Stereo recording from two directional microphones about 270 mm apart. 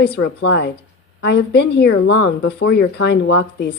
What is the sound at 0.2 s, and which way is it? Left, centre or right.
Speech, left.